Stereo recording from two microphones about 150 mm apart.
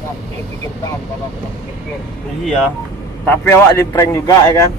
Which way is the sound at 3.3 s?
15° left (ahead or behind).